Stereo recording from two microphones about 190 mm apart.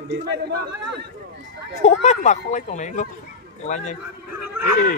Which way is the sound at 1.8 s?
35° left (ahead or behind).